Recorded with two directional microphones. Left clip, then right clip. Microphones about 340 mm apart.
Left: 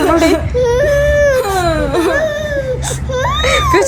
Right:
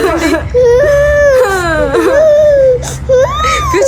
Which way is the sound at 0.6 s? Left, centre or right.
Right.